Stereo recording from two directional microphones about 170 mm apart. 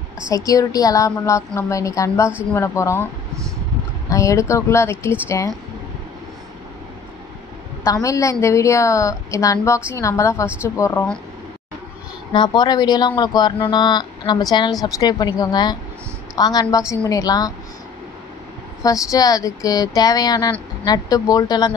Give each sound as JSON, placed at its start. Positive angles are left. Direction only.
{"t": 0.5, "sound": "a woman's voice", "side_deg": 20}
{"t": 4.1, "sound": "a woman's voice", "side_deg": 20}
{"t": 7.8, "sound": "a woman's voice", "side_deg": 20}
{"t": 10.4, "sound": "speech", "side_deg": -10}
{"t": 12.3, "sound": "speech", "side_deg": 25}
{"t": 19.0, "sound": "speech", "side_deg": 20}